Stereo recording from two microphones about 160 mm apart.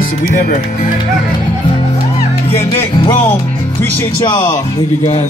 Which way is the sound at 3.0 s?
30° left (ahead or behind).